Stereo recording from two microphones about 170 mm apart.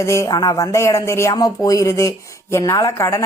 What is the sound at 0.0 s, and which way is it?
A woman's voice, 15° left (ahead or behind).